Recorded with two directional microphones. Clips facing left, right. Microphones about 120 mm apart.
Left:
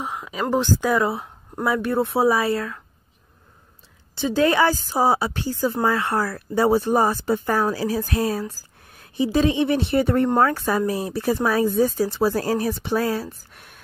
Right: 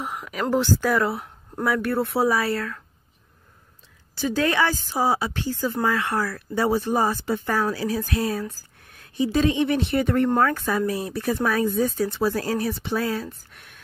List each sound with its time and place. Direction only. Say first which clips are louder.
0.0 s speech: left 1 dB; 20° left (ahead or behind)
4.1 s speech: left 4 dB; 25° left (ahead or behind)